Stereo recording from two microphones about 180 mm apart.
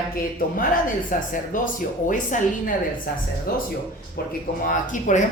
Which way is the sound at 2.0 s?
45° left (ahead or behind).